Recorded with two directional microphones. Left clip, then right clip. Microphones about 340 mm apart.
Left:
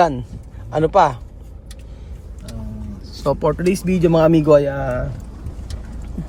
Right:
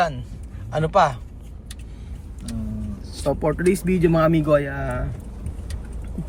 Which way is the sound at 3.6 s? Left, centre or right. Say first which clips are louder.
Left 2 dB; centre.